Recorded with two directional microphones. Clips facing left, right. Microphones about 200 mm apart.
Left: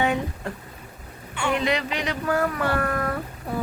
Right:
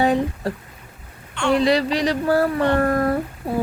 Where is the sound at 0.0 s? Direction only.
35° right (ahead or behind).